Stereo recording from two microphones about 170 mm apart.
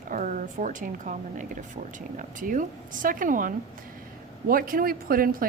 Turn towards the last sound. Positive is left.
turn(degrees=-60)  # may be behind; listen again after turning